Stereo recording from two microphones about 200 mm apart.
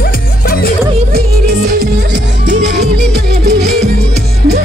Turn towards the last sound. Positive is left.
turn(degrees=-55)  # may be behind; listen again after turning